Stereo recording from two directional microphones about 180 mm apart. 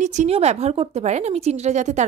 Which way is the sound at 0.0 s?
40° right (ahead or behind).